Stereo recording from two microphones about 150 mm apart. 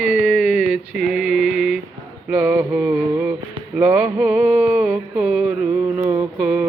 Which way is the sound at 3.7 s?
10° right (ahead or behind).